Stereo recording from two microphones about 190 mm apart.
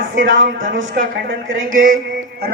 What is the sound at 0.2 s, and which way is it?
Speech, 85° right.